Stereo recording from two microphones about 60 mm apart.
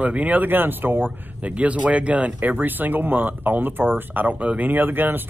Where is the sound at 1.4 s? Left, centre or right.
Right.